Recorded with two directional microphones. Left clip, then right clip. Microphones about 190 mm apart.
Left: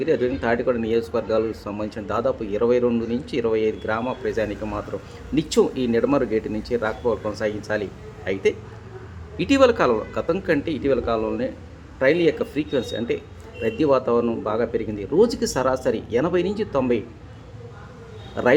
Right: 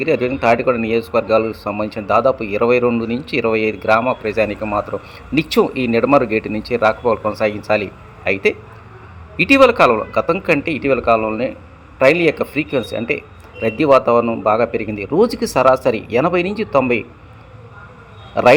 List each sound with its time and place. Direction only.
0.0 s speech: 20° right (ahead or behind)